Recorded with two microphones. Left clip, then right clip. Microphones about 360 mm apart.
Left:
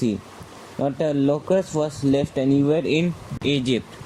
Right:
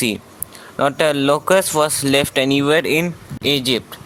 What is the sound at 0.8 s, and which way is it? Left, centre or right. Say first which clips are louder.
Speech: right 6 dB; right.